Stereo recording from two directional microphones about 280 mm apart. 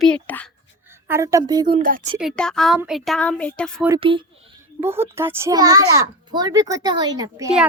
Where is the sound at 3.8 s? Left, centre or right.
Centre.